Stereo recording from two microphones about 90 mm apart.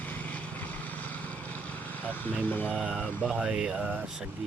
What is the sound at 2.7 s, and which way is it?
Speech, 5° right (ahead or behind).